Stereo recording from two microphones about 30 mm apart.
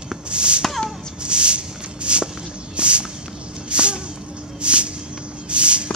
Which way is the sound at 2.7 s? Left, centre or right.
Right.